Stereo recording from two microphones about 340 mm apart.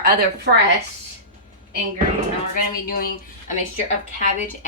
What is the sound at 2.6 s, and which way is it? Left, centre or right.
A woman's voice, left.